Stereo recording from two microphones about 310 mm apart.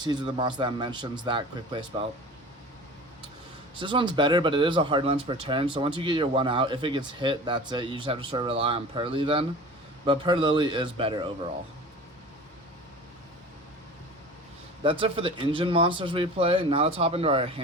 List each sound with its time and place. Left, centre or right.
0.0 s speech: centre
3.8 s speech: centre
14.8 s speech: centre